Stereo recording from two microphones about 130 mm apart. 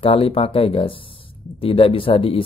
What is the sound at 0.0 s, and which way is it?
Speech, 45° left (ahead or behind).